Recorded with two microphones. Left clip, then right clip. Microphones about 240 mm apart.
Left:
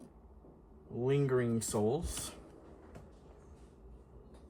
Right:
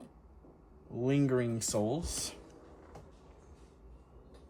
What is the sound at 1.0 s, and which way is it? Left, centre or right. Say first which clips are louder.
Speech: right 1 dB; centre.